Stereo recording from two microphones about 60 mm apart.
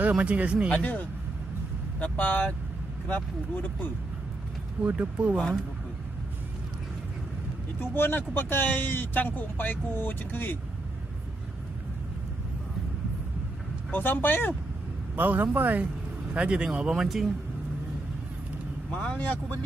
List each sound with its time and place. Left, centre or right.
0.1 s speech: right
0.7 s speech: left
4.9 s speech: right
7.8 s speech: left
13.9 s speech: left
15.1 s a man's voice: right
16.3 s speech: centre
19.0 s speech: left